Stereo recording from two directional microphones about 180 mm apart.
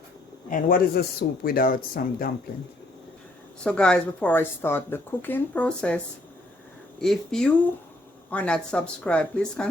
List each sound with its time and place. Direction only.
0.5 s speech: 55° left (ahead or behind)
3.6 s speech: 5° left (ahead or behind)
7.0 s speech: 5° left (ahead or behind)